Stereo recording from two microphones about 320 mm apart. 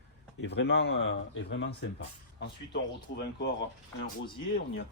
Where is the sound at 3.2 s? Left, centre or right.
Left.